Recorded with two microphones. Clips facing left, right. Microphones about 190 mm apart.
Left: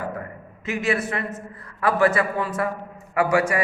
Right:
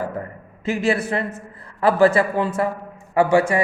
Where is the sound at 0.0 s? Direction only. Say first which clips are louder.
Right 3 dB; 30° right (ahead or behind).